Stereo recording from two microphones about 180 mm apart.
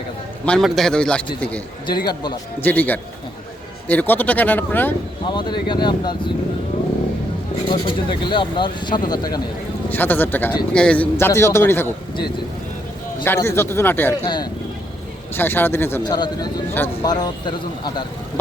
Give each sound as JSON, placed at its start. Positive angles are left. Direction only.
{"t": 0.4, "sound": "a man's voice", "side_deg": 5}
{"t": 1.9, "sound": "speech", "side_deg": 25}
{"t": 2.6, "sound": "a man's voice", "side_deg": 10}
{"t": 5.2, "sound": "speech", "side_deg": 25}
{"t": 7.7, "sound": "speech", "side_deg": 25}
{"t": 9.9, "sound": "a man's voice", "side_deg": 10}
{"t": 13.2, "sound": "a man's voice", "side_deg": 15}
{"t": 15.4, "sound": "a man's voice", "side_deg": 10}
{"t": 16.0, "sound": "speech", "side_deg": 25}